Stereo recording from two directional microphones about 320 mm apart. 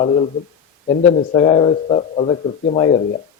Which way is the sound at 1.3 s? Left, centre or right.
Centre.